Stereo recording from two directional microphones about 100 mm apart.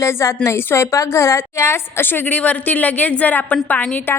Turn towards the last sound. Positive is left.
turn(degrees=20)  # may be behind; listen again after turning